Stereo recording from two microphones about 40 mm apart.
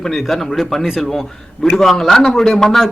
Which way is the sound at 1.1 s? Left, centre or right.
Centre.